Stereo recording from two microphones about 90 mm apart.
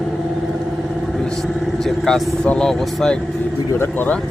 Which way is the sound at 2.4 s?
5° left (ahead or behind).